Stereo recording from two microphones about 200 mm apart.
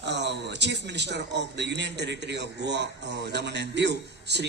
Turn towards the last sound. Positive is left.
turn(degrees=-60)  # may be behind; listen again after turning